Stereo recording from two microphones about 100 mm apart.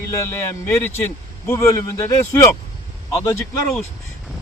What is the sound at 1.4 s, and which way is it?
Speech, 30° left (ahead or behind).